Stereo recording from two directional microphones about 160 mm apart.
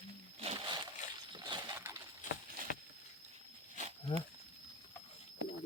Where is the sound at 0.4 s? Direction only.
30° right (ahead or behind).